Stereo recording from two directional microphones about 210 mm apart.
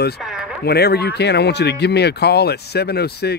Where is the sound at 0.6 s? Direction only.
50° left (ahead or behind).